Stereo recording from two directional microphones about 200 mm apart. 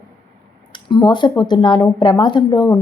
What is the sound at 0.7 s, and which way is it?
Speech, 20° left (ahead or behind).